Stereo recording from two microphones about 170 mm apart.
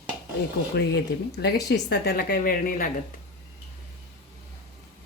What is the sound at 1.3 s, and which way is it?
Speech, 75° left (ahead or behind).